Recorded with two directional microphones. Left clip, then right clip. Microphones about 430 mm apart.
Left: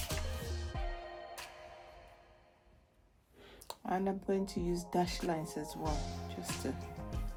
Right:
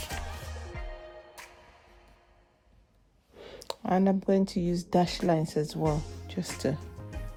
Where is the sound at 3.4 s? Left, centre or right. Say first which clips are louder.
Right 10 dB; centre.